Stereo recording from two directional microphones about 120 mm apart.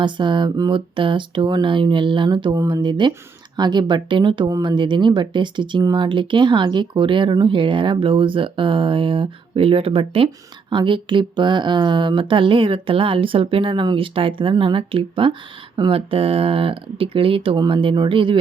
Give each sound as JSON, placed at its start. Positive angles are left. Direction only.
{"t": 0.0, "sound": "speech", "side_deg": -40}
{"t": 16.0, "sound": "speech", "side_deg": -55}